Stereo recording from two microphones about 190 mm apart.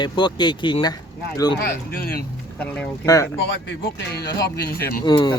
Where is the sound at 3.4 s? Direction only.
65° left (ahead or behind).